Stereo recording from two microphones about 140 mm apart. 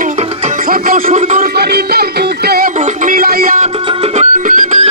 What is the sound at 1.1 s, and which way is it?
Music, 55° right (ahead or behind).